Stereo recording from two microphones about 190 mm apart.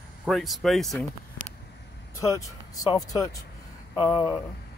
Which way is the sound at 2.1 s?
15° left (ahead or behind).